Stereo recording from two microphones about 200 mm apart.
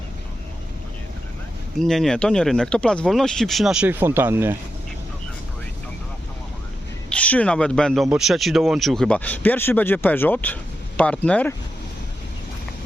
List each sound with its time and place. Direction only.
1.8 s speech: centre (ahead or behind)
7.1 s speech: 5° left (ahead or behind)